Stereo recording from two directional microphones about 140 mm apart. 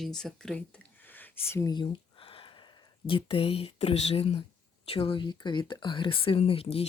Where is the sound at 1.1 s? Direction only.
15° left (ahead or behind).